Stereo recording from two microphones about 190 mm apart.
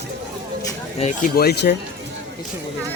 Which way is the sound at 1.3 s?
55° left (ahead or behind).